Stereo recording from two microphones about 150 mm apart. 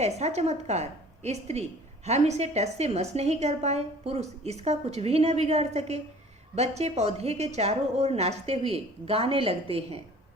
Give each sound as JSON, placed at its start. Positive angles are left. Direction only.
{"t": 0.0, "sound": "a woman's voice", "side_deg": -45}